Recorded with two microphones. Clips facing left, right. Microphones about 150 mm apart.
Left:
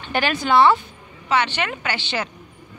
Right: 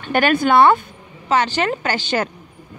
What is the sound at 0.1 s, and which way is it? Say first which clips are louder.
Speech: right 4 dB; 50° right (ahead or behind).